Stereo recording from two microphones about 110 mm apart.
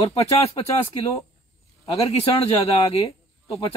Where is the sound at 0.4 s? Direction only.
65° left (ahead or behind).